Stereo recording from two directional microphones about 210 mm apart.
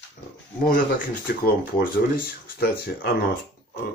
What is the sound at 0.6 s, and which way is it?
Speech, 45° left (ahead or behind).